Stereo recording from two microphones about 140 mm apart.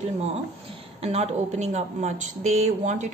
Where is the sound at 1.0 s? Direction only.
50° right (ahead or behind).